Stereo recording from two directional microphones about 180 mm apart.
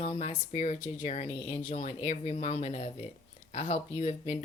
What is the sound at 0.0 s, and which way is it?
Speech, 35° left (ahead or behind).